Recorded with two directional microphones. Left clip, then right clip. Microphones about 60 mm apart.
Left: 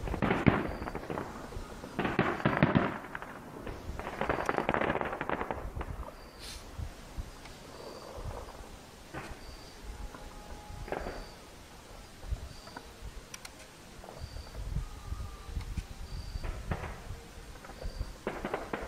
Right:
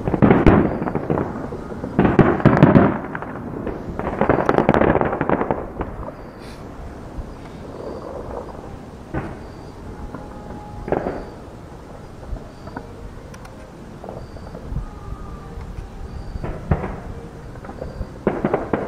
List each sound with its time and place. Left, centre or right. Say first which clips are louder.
0.0 s fireworks: right 15 dB; left
1.2 s fireworks: right 15 dB; left
2.0 s fireworks: right 15 dB; left
2.6 s fireworks: right 16 dB; left
2.9 s firecracker: right 14 dB; left
3.9 s fireworks: right 15 dB; left
9.1 s a sound: right 14 dB; left
10.9 s fireworks: right 16 dB; left
16.4 s a sound: right 15 dB; left
18.3 s fireworks: right 16 dB; left